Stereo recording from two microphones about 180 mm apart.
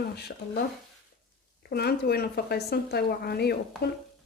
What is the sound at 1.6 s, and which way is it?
Speech, 60° left (ahead or behind).